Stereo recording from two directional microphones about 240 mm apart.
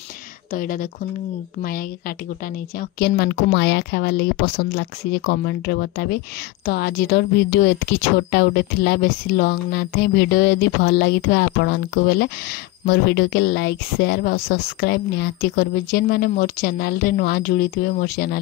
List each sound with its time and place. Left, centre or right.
0.5 s a woman's voice: left